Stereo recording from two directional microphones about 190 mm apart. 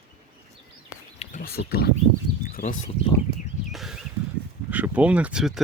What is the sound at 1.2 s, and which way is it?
Bird, 45° left (ahead or behind).